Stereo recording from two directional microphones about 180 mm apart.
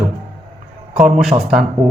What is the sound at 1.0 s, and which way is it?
Speech, centre (ahead or behind).